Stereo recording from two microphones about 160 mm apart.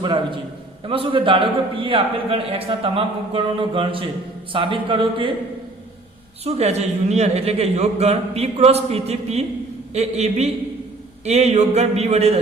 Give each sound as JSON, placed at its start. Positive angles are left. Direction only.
{"t": 0.0, "sound": "a man's voice", "side_deg": -30}
{"t": 6.4, "sound": "a man's voice", "side_deg": -40}
{"t": 9.9, "sound": "a sound", "side_deg": -45}